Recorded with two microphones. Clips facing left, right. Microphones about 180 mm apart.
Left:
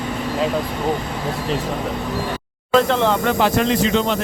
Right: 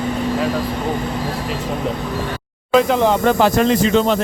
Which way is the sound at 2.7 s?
10° right (ahead or behind).